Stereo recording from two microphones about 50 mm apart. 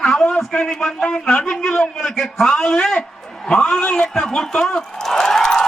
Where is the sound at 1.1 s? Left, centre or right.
Left.